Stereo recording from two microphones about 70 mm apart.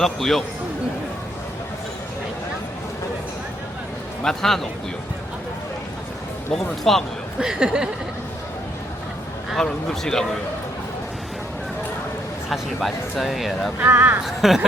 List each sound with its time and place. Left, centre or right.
0.0 s speech: centre
4.2 s speech: centre
6.5 s speech: centre
7.3 s speech: centre
9.6 s speech: centre
12.5 s speech: centre
13.8 s speech: right
14.3 s speech: centre